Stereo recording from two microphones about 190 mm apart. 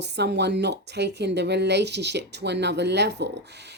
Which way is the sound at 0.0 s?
60° right (ahead or behind).